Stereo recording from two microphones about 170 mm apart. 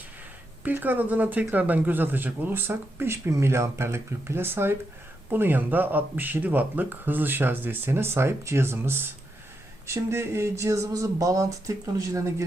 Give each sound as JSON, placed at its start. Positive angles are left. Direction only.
{"t": 0.6, "sound": "speech", "side_deg": -10}